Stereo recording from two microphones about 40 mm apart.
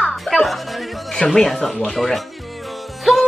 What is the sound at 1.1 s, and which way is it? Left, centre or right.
Music, centre.